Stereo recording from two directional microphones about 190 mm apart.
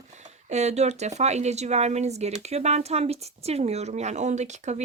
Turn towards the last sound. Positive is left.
turn(degrees=-40)  # may be behind; listen again after turning